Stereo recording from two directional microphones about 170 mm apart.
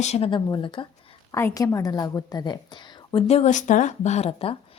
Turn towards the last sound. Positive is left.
turn(degrees=35)  # may be behind; listen again after turning